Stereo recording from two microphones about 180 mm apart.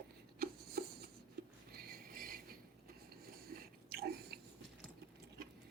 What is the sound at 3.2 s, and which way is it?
Biting, 55° right (ahead or behind).